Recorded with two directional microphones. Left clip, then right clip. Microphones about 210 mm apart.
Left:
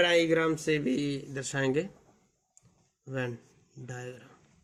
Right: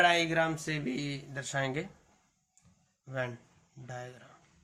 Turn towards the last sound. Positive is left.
turn(degrees=25)  # may be behind; listen again after turning